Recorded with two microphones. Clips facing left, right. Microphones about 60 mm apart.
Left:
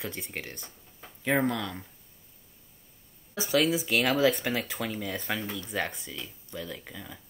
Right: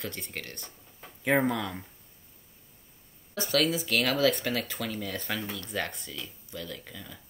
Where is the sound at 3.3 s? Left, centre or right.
Centre.